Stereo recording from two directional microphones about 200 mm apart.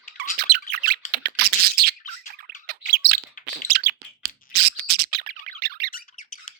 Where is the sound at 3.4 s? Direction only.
50° right (ahead or behind).